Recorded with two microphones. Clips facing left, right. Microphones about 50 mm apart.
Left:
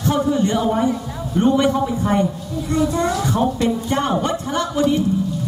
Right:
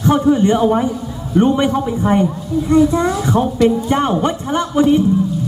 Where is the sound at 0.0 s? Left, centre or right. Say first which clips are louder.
Right 5 dB; right.